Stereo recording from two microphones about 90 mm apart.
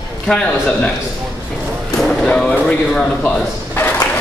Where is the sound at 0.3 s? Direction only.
10° left (ahead or behind).